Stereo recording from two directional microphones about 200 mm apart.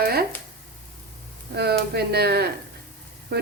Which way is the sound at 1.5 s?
55° right (ahead or behind).